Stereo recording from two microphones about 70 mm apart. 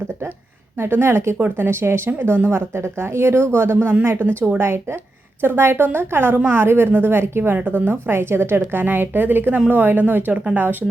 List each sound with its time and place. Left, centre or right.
0.8 s a woman's voice: right